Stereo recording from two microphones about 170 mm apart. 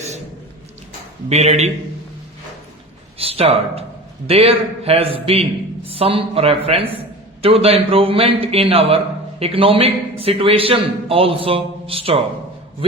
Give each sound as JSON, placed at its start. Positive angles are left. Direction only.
{"t": 1.3, "sound": "a man's voice", "side_deg": -40}
{"t": 3.2, "sound": "a man's voice", "side_deg": -35}